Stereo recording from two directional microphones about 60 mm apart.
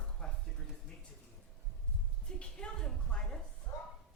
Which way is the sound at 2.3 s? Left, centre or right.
Centre.